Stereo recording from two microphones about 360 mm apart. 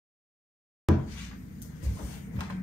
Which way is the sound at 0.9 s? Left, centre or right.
Centre.